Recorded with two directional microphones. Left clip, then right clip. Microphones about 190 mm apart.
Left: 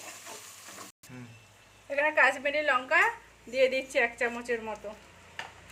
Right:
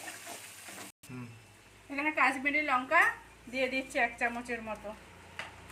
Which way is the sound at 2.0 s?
55° left (ahead or behind).